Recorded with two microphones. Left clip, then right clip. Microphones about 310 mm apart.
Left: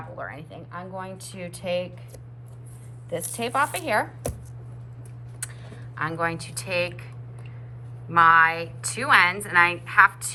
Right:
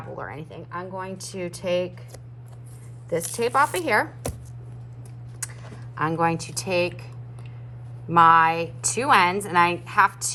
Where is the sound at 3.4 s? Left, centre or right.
Right.